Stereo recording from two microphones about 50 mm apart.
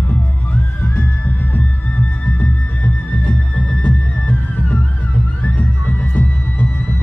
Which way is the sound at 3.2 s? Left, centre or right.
Centre.